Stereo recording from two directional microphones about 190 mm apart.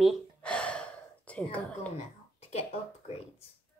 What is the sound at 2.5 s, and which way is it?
Speech, 35° left (ahead or behind).